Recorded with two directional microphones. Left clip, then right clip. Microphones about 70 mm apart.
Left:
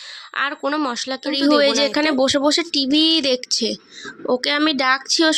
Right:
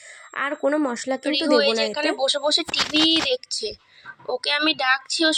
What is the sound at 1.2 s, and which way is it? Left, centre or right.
Speech, left.